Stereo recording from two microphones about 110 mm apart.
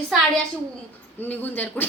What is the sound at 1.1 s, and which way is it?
Speech, 15° left (ahead or behind).